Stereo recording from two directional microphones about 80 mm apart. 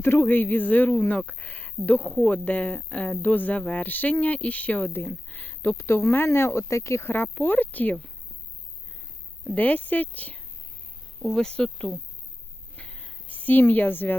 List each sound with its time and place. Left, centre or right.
0.0 s speech: left
5.3 s a sound: left
5.7 s speech: left
9.6 s speech: left
11.2 s speech: centre
12.7 s a sound: centre